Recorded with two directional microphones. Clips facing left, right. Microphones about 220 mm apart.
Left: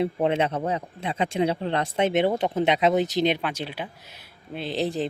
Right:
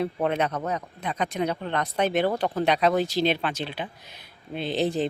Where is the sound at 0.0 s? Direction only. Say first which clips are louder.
Left 2 dB; 25° left (ahead or behind).